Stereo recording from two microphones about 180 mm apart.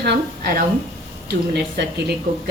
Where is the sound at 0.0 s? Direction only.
60° right (ahead or behind).